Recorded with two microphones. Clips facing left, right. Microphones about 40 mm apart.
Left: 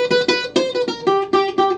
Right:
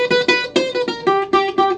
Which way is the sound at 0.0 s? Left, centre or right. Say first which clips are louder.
Right 1 dB; right.